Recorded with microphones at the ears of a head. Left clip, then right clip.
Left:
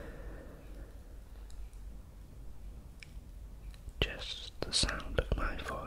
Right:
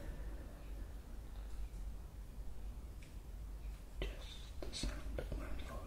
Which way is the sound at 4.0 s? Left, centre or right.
Left.